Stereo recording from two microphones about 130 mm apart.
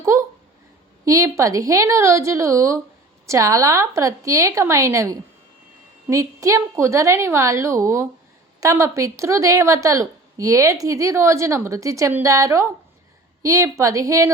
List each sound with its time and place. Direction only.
0.0 s a woman's voice: 20° right (ahead or behind)